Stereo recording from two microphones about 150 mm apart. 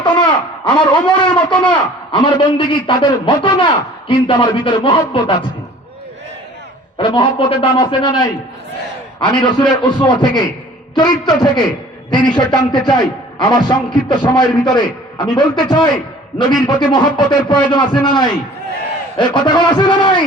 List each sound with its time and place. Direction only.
0.0 s a sound: 30° left (ahead or behind)
2.1 s a man's voice: 30° left (ahead or behind)
7.0 s a man's voice: 35° left (ahead or behind)
9.2 s a man's voice: 30° left (ahead or behind)